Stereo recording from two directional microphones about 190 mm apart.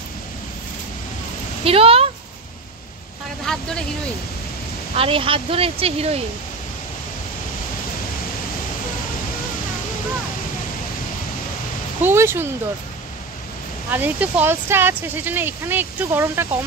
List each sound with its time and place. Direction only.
1.6 s a sound: 30° right (ahead or behind)
3.5 s speech: centre (ahead or behind)
4.9 s speech: 30° right (ahead or behind)
12.0 s speech: 10° right (ahead or behind)
13.8 s speech: 10° right (ahead or behind)